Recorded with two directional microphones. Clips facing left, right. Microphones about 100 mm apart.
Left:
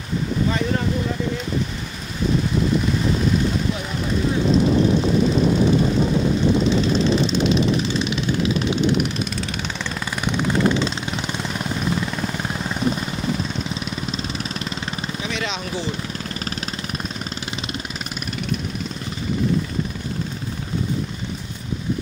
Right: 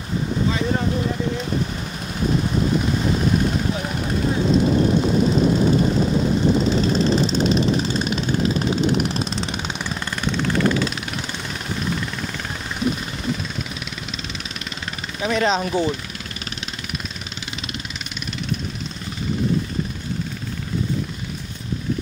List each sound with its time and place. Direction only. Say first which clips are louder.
6.8 s vehicle: even; 40° right (ahead or behind)
10.2 s vehicle: left 1 dB; 15° left (ahead or behind)
15.2 s speech: right 11 dB; 40° right (ahead or behind)